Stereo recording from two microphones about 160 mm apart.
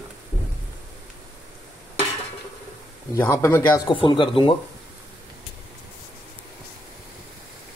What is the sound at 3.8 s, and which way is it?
Speech, 30° left (ahead or behind).